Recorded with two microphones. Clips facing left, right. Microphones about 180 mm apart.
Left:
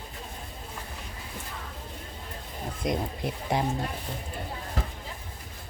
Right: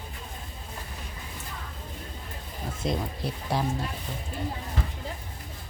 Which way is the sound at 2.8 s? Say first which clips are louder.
Left 1 dB; 20° left (ahead or behind).